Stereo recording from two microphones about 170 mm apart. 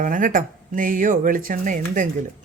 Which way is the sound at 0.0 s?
50° right (ahead or behind).